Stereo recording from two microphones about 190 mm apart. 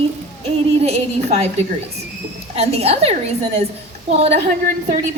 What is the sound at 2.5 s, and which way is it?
A woman's voice, 35° right (ahead or behind).